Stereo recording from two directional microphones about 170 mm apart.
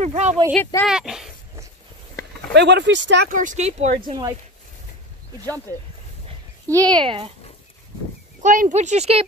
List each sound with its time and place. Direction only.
0.0 s speech: 45° right (ahead or behind)
0.8 s speech: 5° right (ahead or behind)
2.5 s speech: 90° right
3.3 s speech: 50° right (ahead or behind)
4.0 s speech: 25° right (ahead or behind)
5.4 s speech: 10° left (ahead or behind)
6.7 s speech: 25° right (ahead or behind)
8.4 s speech: 50° right (ahead or behind)